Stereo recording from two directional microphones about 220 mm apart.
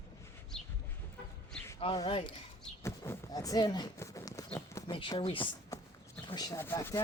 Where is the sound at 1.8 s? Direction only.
25° left (ahead or behind).